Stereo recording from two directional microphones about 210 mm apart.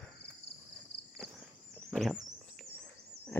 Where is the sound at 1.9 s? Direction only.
Centre (ahead or behind).